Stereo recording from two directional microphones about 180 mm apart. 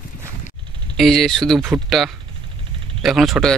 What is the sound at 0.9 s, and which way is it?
Speech, centre (ahead or behind).